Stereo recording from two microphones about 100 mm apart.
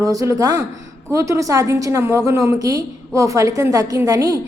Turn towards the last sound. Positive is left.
turn(degrees=-35)  # may be behind; listen again after turning